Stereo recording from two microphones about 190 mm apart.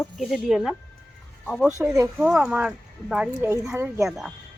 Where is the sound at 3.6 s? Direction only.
15° right (ahead or behind).